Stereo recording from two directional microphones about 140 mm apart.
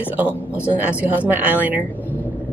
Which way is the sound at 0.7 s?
10° right (ahead or behind).